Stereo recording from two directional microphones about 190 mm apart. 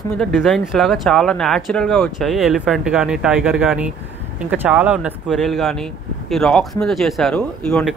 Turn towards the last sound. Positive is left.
turn(degrees=5)  # may be behind; listen again after turning